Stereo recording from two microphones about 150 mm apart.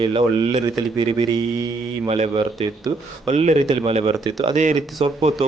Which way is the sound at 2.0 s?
45° right (ahead or behind).